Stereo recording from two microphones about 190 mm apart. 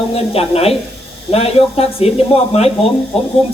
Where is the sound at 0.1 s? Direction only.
30° left (ahead or behind).